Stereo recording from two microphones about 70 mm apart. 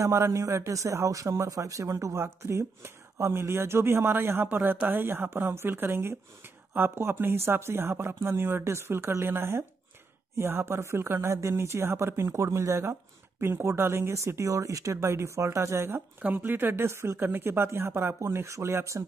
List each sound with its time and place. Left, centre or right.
0.0 s a man's voice: right
2.1 s speech: right
16.2 s speech: right